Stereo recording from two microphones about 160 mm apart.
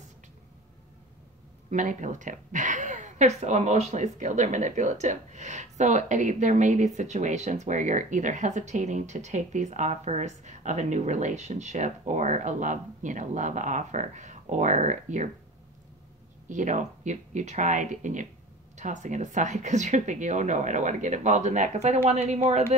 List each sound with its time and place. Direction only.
1.7 s speech: 50° right (ahead or behind)
16.4 s speech: 50° right (ahead or behind)